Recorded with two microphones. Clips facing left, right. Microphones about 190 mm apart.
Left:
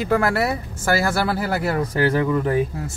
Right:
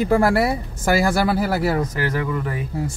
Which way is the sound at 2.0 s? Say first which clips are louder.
Left 4 dB; 30° left (ahead or behind).